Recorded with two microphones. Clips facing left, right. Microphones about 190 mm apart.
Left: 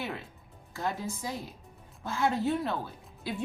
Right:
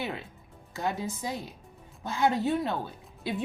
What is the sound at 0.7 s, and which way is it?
A woman's voice, 20° right (ahead or behind).